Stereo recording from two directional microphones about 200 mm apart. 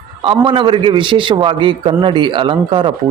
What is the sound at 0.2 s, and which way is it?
A man's voice, 25° right (ahead or behind).